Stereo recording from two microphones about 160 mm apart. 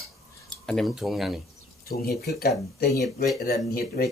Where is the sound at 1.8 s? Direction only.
75° left (ahead or behind).